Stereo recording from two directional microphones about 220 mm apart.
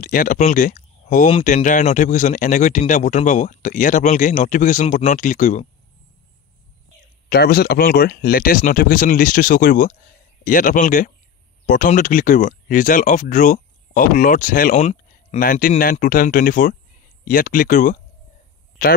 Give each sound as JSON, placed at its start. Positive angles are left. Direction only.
{"t": 0.0, "sound": "speech", "side_deg": 40}
{"t": 7.2, "sound": "speech", "side_deg": 45}